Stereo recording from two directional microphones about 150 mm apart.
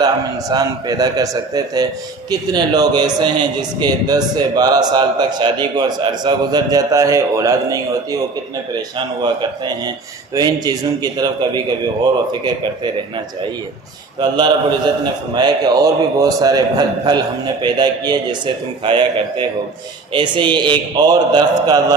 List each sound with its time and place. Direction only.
0.5 s a man's voice: 25° right (ahead or behind)
9.2 s a man's voice: 30° right (ahead or behind)
14.2 s a man's voice: 30° right (ahead or behind)